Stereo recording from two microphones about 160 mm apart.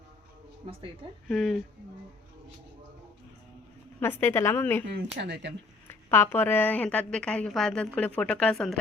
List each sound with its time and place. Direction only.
0.6 s speech: 35° right (ahead or behind)
1.3 s a woman's voice: centre (ahead or behind)
4.0 s a woman's voice: 15° left (ahead or behind)
4.9 s speech: 90° right
5.9 s a woman's voice: 15° left (ahead or behind)